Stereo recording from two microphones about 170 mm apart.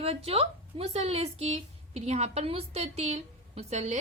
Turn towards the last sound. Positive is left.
turn(degrees=-40)  # may be behind; listen again after turning